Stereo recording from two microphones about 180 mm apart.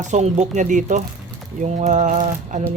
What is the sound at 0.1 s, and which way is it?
Speech, 40° right (ahead or behind).